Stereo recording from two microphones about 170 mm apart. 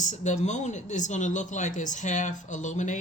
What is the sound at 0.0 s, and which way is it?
Speech, 45° left (ahead or behind).